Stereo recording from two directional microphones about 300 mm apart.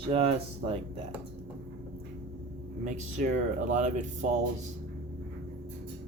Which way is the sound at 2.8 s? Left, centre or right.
Right.